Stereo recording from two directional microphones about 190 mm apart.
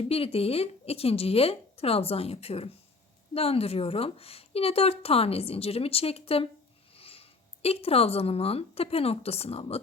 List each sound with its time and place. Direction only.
0.0 s a woman's voice: 30° left (ahead or behind)